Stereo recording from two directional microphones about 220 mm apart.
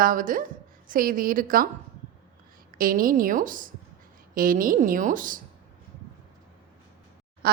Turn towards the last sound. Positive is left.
turn(degrees=-45)  # may be behind; listen again after turning